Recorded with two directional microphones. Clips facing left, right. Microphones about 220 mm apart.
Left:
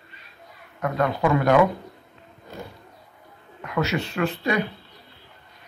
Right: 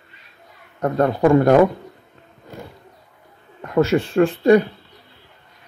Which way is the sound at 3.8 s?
50° right (ahead or behind).